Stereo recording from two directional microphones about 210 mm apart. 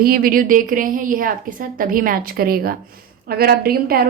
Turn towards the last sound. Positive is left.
turn(degrees=-45)  # may be behind; listen again after turning